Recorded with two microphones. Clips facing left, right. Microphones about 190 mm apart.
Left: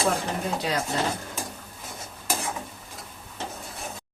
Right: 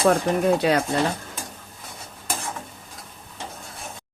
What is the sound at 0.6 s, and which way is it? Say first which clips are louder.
Speech: right 7 dB; 60° right (ahead or behind).